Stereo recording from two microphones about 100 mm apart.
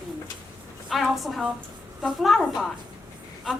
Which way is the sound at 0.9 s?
Centre (ahead or behind).